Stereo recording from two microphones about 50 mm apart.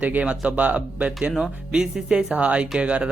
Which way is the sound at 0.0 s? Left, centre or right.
Right.